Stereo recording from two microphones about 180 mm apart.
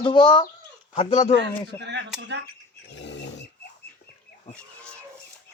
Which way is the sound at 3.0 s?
75° left (ahead or behind).